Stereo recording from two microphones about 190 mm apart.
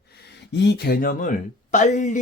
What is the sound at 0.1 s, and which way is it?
Speech, 60° left (ahead or behind).